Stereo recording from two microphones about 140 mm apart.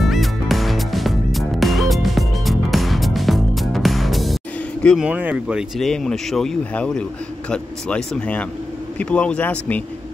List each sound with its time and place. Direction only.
0.0 s music: centre (ahead or behind)
4.8 s speech: 5° right (ahead or behind); by 9.8 s 10° left (ahead or behind)